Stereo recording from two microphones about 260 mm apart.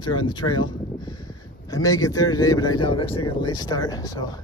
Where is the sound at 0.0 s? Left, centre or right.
Centre.